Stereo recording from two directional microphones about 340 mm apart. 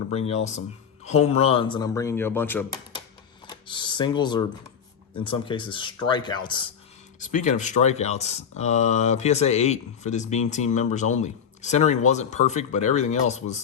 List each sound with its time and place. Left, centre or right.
0.1 s speech: centre